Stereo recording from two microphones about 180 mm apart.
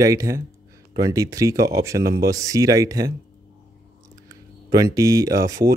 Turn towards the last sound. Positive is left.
turn(degrees=-15)  # may be behind; listen again after turning